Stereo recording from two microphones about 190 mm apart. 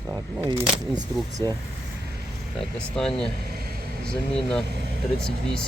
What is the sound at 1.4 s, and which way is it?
Speech, 20° right (ahead or behind).